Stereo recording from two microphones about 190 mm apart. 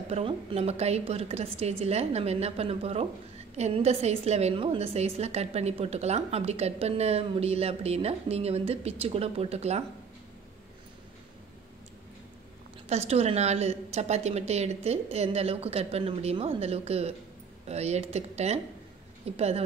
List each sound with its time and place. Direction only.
0.1 s a woman's voice: 30° right (ahead or behind)
12.8 s a woman's voice: 35° right (ahead or behind)